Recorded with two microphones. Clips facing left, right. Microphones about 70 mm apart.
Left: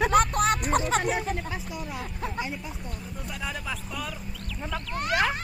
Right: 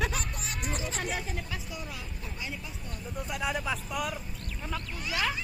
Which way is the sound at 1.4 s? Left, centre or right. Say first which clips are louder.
Left 5 dB; left.